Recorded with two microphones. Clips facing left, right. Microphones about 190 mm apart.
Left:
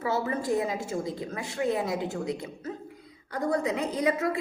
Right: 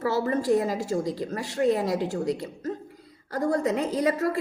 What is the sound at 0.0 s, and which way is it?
A woman's voice, 40° right (ahead or behind).